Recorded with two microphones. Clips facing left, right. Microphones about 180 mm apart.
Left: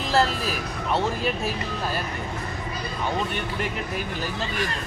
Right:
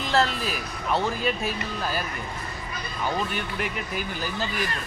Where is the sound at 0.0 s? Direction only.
Centre (ahead or behind).